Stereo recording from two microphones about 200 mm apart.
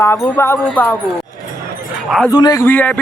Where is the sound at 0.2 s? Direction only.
10° left (ahead or behind).